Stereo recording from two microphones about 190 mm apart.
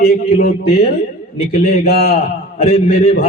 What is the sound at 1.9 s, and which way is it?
Speech, 55° left (ahead or behind).